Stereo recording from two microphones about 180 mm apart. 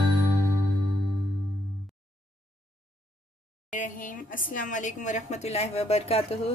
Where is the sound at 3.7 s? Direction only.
45° left (ahead or behind).